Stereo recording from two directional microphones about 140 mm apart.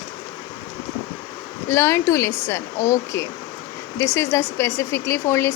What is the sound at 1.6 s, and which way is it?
Speech, 20° left (ahead or behind).